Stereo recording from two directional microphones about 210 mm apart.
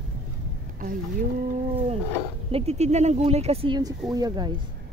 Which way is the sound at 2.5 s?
30° right (ahead or behind).